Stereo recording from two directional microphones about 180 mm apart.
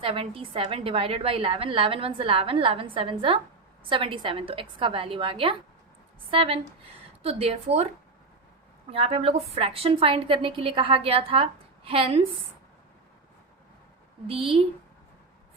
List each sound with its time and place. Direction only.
0.0 s a woman's voice: 30° right (ahead or behind)
8.9 s a woman's voice: 30° right (ahead or behind)
14.3 s a woman's voice: 30° right (ahead or behind)